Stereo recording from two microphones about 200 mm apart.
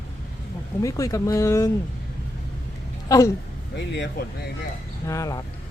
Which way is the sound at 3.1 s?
15° left (ahead or behind).